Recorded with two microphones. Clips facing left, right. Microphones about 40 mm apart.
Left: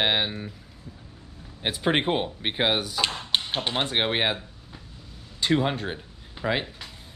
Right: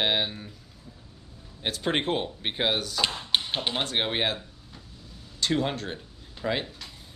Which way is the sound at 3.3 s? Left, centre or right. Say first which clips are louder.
Left 1 dB; centre.